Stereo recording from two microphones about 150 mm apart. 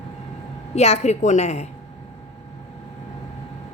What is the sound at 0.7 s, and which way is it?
Speech, 45° left (ahead or behind).